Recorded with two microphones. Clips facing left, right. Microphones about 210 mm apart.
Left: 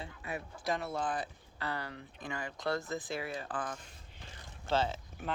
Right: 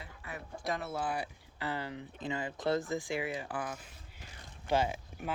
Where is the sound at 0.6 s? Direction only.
Centre (ahead or behind).